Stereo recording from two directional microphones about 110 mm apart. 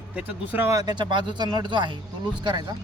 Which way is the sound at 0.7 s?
35° right (ahead or behind).